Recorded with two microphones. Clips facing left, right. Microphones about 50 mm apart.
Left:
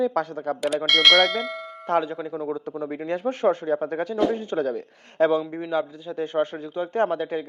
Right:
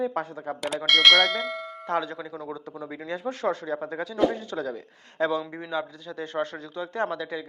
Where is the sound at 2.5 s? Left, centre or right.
Left.